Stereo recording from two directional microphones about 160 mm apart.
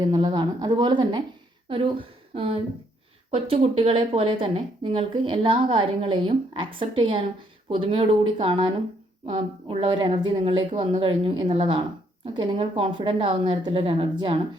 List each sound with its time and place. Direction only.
0.0 s a woman's voice: 30° right (ahead or behind)